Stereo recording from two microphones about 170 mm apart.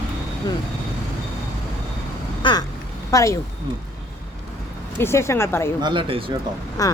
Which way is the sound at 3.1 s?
20° left (ahead or behind).